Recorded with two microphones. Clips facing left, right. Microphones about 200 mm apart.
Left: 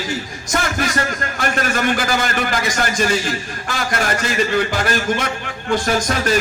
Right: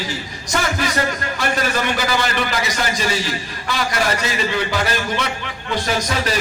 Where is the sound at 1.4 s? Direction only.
50° left (ahead or behind).